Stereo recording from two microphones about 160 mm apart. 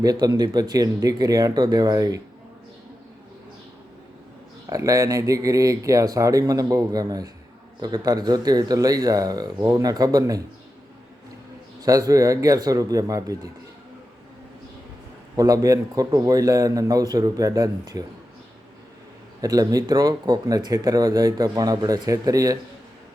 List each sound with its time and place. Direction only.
0.0 s speech: 25° right (ahead or behind)
4.6 s speech: 20° right (ahead or behind)
11.8 s speech: 20° right (ahead or behind)
15.4 s speech: 20° right (ahead or behind)
19.4 s speech: 20° right (ahead or behind)